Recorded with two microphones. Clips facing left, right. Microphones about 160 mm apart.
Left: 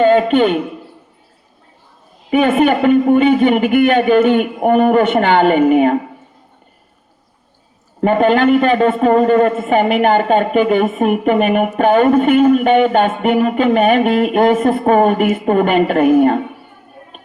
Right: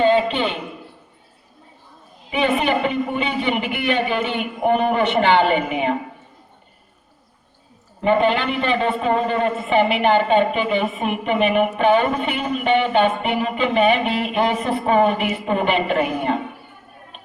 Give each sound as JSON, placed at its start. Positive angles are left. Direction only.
{"t": 0.0, "sound": "a man's voice", "side_deg": 50}
{"t": 2.3, "sound": "a man's voice", "side_deg": 50}
{"t": 8.0, "sound": "a man's voice", "side_deg": 45}